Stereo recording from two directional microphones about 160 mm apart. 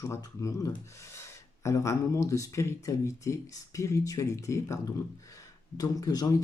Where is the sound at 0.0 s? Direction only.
20° left (ahead or behind).